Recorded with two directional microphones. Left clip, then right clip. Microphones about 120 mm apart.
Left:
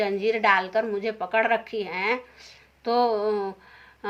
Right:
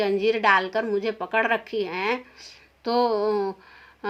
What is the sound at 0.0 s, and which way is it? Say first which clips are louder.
Speech: right 1 dB; 40° right (ahead or behind).